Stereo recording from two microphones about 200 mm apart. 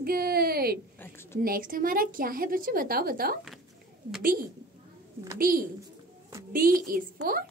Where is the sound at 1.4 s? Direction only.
45° right (ahead or behind).